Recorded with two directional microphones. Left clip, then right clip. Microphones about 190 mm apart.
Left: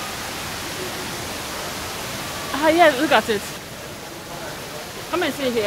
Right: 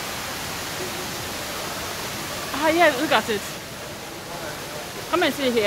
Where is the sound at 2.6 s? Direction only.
25° left (ahead or behind).